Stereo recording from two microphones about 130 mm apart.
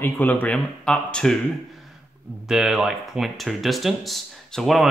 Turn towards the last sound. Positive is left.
turn(degrees=0)  # may be behind; listen again after turning